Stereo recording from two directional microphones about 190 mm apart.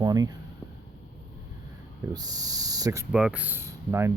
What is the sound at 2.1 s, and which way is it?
Speech, 20° right (ahead or behind).